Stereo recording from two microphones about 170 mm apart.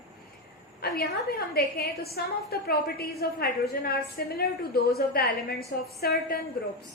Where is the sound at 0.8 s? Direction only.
65° left (ahead or behind).